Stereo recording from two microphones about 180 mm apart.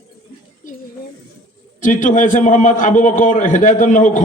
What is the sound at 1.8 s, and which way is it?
A man's voice, 45° left (ahead or behind).